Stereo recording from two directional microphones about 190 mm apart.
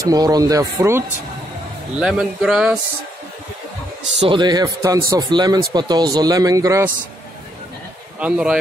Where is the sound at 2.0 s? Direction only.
5° right (ahead or behind).